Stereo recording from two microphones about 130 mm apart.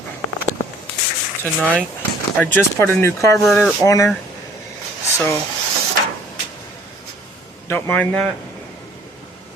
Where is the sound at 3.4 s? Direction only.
Centre (ahead or behind).